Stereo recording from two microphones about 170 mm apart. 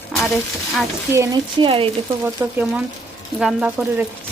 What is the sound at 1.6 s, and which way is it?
Speech, 30° right (ahead or behind).